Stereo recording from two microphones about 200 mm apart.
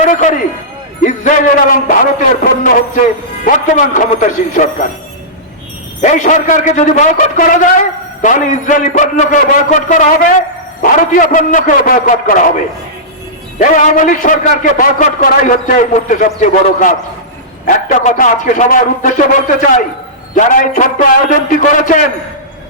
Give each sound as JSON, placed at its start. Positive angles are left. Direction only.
{"t": 0.0, "sound": "a man's voice", "side_deg": 40}
{"t": 6.0, "sound": "a man's voice", "side_deg": 40}
{"t": 13.6, "sound": "a man's voice", "side_deg": 40}